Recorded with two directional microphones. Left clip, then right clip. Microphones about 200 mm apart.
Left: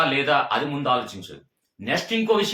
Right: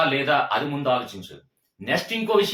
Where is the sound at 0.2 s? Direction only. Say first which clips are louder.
Left 1 dB; 15° left (ahead or behind).